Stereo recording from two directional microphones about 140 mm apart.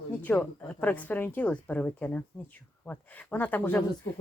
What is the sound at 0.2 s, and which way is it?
Speech, 10° left (ahead or behind).